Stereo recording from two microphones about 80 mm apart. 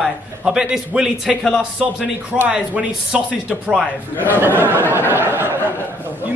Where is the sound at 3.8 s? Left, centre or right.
Left.